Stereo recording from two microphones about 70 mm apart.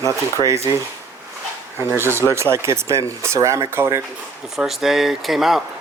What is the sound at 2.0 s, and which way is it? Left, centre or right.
Speech, right.